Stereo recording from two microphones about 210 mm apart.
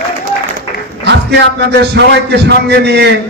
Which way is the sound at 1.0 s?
55° right (ahead or behind).